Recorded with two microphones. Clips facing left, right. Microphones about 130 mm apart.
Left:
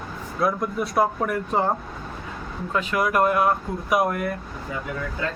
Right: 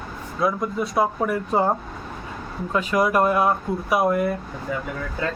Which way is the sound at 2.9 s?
20° right (ahead or behind).